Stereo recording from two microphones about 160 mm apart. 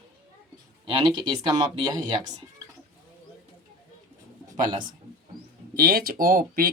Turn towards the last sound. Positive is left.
turn(degrees=-65)  # may be behind; listen again after turning